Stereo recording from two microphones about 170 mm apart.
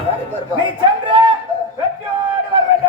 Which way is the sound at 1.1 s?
30° right (ahead or behind).